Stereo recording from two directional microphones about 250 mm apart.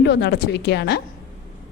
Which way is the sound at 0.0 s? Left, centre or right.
Left.